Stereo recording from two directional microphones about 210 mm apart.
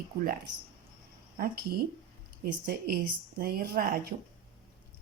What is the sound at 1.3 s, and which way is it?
Speech, 45° right (ahead or behind).